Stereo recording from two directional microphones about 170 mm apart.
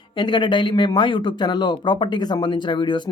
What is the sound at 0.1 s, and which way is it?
Speech, 25° left (ahead or behind).